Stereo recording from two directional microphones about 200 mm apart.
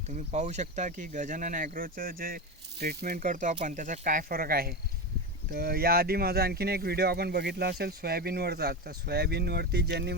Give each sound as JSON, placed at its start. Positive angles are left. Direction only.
{"t": 0.1, "sound": "speech", "side_deg": -35}